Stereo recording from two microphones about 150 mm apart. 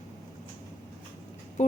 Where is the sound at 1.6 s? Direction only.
55° left (ahead or behind).